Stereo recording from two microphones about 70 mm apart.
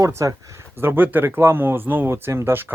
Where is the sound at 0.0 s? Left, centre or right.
Right.